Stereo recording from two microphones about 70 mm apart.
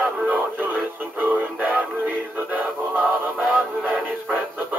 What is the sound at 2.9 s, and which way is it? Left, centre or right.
Music, right.